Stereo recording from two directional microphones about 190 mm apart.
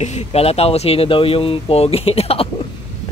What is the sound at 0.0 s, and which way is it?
Speech, 35° left (ahead or behind).